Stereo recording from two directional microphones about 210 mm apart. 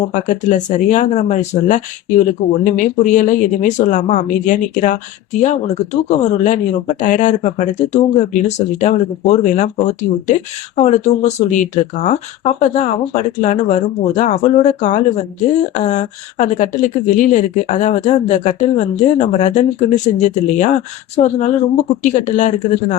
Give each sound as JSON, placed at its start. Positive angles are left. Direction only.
{"t": 0.1, "sound": "speech", "side_deg": 35}